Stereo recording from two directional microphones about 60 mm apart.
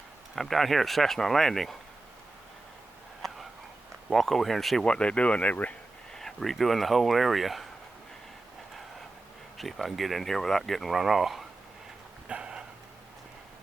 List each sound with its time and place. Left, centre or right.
0.3 s speech: centre
3.2 s a sound: centre
4.1 s speech: centre
4.9 s speech: centre
6.1 s speech: centre
9.6 s speech: centre
12.3 s dog: centre